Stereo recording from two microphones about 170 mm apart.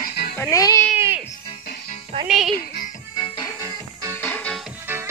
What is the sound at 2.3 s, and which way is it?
Music, centre (ahead or behind).